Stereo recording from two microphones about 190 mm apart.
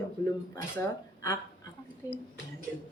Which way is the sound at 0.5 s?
20° left (ahead or behind).